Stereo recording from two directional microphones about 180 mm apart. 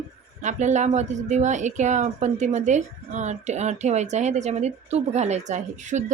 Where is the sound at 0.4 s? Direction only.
40° right (ahead or behind).